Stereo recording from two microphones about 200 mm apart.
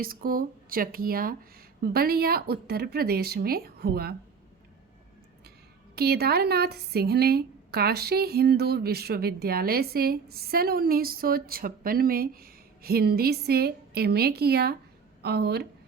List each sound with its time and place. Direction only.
0.0 s a woman's voice: 45° right (ahead or behind)
6.0 s a woman's voice: 50° right (ahead or behind)